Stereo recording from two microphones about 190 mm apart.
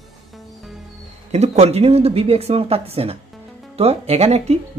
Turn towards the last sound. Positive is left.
turn(degrees=-35)  # may be behind; listen again after turning